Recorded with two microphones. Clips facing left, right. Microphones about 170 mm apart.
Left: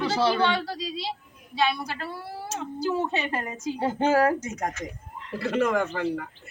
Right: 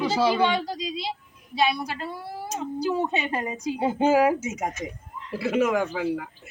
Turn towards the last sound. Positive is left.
turn(degrees=-5)  # may be behind; listen again after turning